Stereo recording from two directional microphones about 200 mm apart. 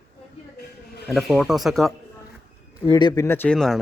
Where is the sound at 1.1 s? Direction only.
Centre (ahead or behind).